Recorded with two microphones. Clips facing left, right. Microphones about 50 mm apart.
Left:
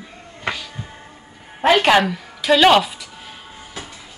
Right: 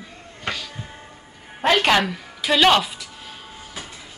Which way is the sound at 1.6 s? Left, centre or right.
Centre.